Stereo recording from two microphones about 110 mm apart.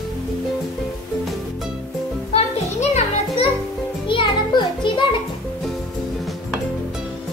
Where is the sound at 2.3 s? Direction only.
80° left.